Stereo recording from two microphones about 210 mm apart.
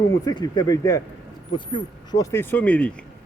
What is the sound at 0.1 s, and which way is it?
Speech, 20° left (ahead or behind).